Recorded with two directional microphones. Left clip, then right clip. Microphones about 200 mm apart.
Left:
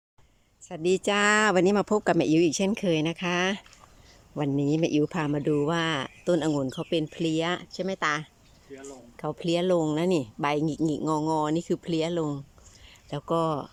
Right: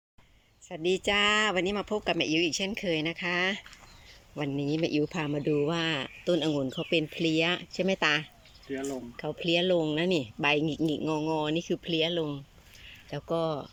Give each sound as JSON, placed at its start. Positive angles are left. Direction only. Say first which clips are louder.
{"t": 0.7, "sound": "speech", "louder": "left 2 dB", "side_deg": 10}
{"t": 2.1, "sound": "speech", "louder": "left 5 dB", "side_deg": 65}
{"t": 2.4, "sound": "speech", "louder": "left 4 dB", "side_deg": 15}